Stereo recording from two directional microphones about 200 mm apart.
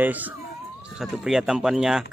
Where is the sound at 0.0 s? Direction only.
10° right (ahead or behind).